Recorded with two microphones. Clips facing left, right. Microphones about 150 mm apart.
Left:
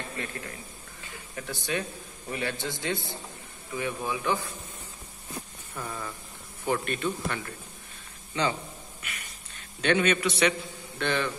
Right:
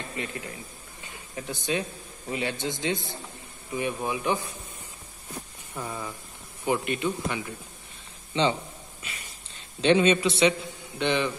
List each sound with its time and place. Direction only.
0.1 s a man's voice: 15° right (ahead or behind)
1.0 s a sound: 20° right (ahead or behind)
1.7 s a man's voice: 20° right (ahead or behind)
5.8 s speech: 15° right (ahead or behind)
8.3 s a man's voice: 20° right (ahead or behind)
9.0 s a sound: 30° right (ahead or behind)
9.8 s a man's voice: 25° right (ahead or behind)